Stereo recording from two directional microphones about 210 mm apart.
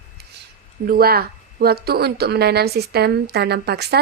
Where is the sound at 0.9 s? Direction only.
45° right (ahead or behind).